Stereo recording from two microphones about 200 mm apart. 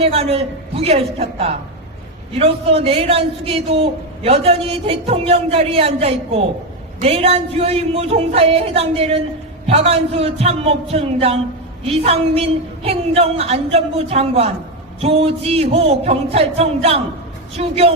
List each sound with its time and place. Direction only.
0.0 s a man's voice: 30° right (ahead or behind)